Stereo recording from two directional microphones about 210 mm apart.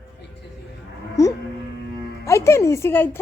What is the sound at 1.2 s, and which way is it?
Music, 15° left (ahead or behind).